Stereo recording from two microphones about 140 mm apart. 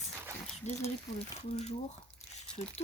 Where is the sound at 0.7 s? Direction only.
55° left (ahead or behind).